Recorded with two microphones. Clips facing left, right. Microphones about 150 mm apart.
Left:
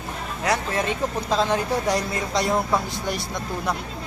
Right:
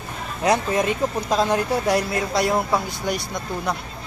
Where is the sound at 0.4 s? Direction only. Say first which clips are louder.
Right 4 dB; 20° right (ahead or behind); by 3.2 s 5° right (ahead or behind).